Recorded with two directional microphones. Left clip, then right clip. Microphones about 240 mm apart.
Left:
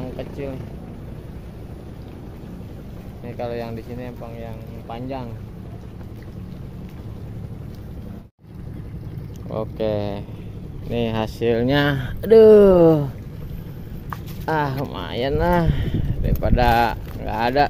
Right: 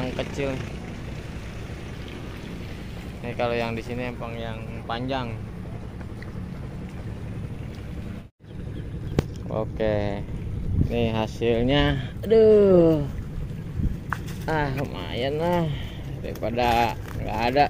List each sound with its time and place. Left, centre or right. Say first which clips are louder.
0.0 s speech: right 2 dB; centre
3.3 s speech: right 3 dB; centre
9.5 s speech: left 3 dB; centre
14.4 s speech: left 5 dB; centre